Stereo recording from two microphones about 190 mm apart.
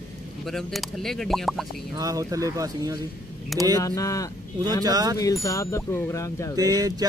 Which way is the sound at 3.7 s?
15° left (ahead or behind).